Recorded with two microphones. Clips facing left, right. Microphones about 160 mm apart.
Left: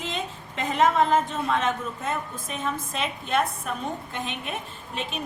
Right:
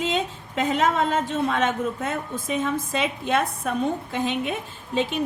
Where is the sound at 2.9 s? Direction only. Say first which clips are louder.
Right 4 dB; 90° right.